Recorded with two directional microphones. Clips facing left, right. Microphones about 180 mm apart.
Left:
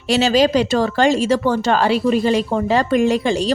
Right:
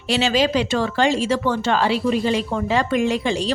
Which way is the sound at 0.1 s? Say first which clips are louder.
Left 4 dB; 40° left (ahead or behind).